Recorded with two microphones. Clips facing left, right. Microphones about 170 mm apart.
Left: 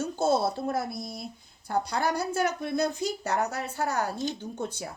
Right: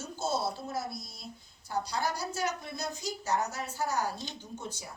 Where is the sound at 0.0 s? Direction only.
55° left (ahead or behind).